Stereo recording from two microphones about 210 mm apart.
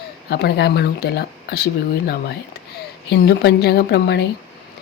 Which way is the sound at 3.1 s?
55° left (ahead or behind).